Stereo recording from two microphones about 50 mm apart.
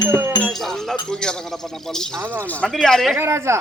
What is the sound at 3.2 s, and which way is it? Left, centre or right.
Speech, right.